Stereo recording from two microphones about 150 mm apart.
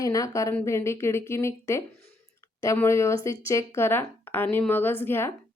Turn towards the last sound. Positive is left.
turn(degrees=15)  # may be behind; listen again after turning